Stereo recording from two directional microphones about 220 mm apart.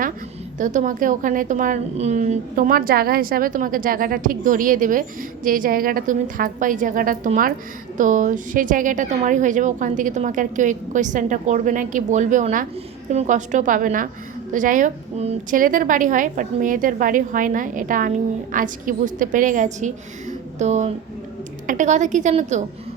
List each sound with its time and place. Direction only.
0.6 s a woman's voice: 35° right (ahead or behind)